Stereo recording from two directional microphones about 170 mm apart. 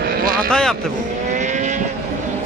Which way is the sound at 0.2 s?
55° right (ahead or behind).